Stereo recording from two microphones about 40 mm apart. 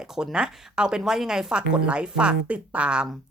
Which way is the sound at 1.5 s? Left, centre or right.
Right.